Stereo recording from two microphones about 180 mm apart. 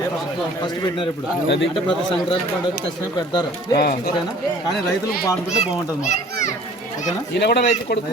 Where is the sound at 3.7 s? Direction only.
55° left (ahead or behind).